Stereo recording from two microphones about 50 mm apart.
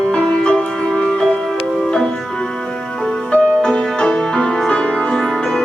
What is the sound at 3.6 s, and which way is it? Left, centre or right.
Music, centre.